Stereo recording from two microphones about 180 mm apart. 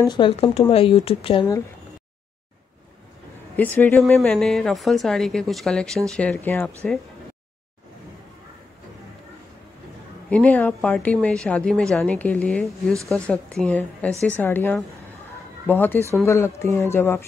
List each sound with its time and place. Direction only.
0.0 s speech: 25° left (ahead or behind)
3.5 s a woman's voice: 10° left (ahead or behind)
10.3 s a woman's voice: 10° left (ahead or behind)